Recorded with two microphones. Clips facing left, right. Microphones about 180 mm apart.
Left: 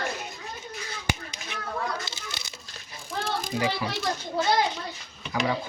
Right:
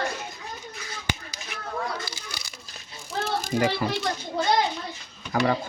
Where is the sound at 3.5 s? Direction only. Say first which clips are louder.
Right 5 dB; 50° right (ahead or behind).